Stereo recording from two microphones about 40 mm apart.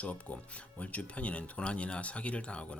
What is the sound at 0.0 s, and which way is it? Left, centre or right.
Speech, left.